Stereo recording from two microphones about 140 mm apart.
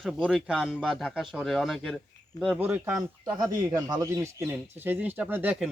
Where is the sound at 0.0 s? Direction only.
5° right (ahead or behind).